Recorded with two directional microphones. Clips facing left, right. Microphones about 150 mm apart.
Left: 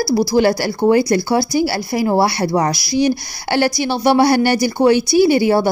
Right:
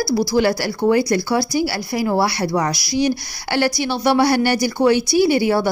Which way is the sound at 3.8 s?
20° left (ahead or behind).